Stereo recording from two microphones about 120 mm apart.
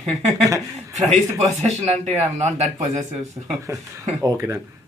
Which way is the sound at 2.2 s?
70° right (ahead or behind).